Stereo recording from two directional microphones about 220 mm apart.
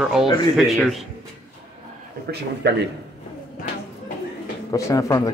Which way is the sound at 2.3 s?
50° right (ahead or behind).